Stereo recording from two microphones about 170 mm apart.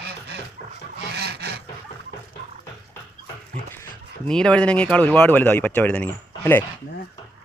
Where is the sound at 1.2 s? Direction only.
70° right (ahead or behind).